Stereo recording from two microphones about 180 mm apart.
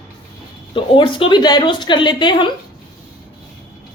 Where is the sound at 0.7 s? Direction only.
30° left (ahead or behind).